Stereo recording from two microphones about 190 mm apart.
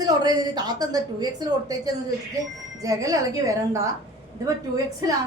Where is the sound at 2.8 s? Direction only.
20° right (ahead or behind).